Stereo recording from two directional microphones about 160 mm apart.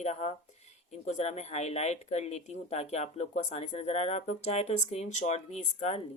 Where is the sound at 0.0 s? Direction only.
45° left (ahead or behind).